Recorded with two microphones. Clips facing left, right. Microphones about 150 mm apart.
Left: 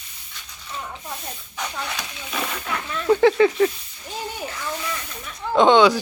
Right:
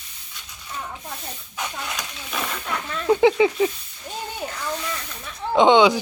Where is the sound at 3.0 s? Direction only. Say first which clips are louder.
Left 1 dB; 15° right (ahead or behind).